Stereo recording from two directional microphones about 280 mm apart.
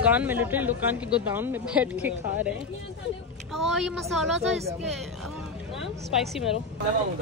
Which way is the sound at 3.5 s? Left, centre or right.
Centre.